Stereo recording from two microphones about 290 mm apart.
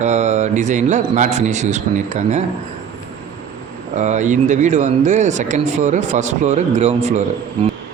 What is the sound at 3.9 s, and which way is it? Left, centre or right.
Speech, right.